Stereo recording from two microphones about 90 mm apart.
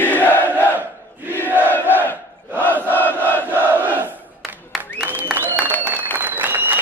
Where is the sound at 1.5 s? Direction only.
20° right (ahead or behind).